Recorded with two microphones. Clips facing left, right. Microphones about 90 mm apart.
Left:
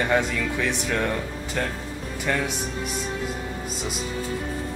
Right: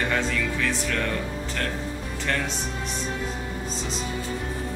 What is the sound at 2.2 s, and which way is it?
Speech, 10° left (ahead or behind).